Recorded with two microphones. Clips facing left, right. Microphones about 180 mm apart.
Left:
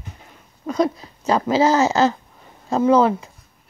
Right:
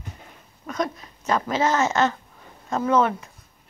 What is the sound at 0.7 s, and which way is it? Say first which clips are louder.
Speech: left 7 dB; 30° left (ahead or behind).